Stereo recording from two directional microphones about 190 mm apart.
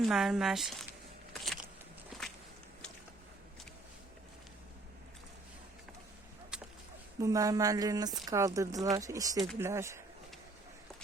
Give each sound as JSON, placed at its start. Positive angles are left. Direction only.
{"t": 0.0, "sound": "speech", "side_deg": 0}
{"t": 2.2, "sound": "walk", "side_deg": 0}
{"t": 6.5, "sound": "a sound", "side_deg": -5}
{"t": 7.2, "sound": "speech", "side_deg": -15}